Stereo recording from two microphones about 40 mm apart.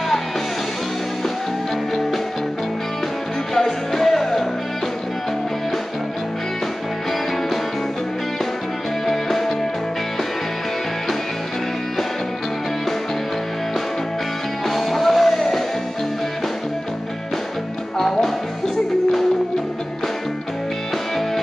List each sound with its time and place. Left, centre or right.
3.5 s music: centre
9.0 s music: centre
14.7 s music: centre
17.9 s music: centre